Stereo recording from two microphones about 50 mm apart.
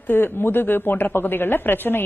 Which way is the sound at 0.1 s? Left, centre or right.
Left.